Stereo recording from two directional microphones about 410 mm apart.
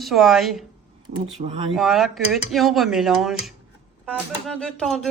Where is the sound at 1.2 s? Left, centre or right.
Centre.